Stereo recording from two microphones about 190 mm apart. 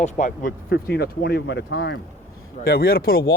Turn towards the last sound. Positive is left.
turn(degrees=55)  # may be behind; listen again after turning